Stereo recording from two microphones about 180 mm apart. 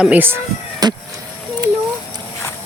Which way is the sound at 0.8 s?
20° right (ahead or behind).